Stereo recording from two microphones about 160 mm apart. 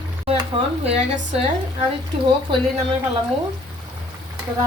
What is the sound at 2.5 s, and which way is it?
Speech, 30° right (ahead or behind).